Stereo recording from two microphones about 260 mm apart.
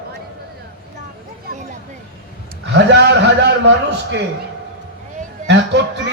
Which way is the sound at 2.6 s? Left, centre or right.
Right.